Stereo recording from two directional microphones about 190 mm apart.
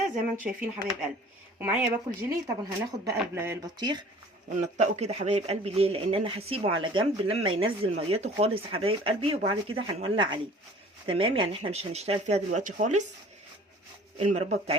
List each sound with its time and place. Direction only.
0.4 s speech: 10° right (ahead or behind)
4.6 s speech: 35° right (ahead or behind)
14.2 s speech: 35° right (ahead or behind)